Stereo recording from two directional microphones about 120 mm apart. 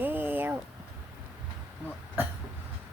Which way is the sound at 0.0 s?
15° right (ahead or behind).